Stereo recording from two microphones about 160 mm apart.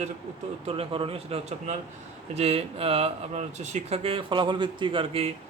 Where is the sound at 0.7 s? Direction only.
35° right (ahead or behind).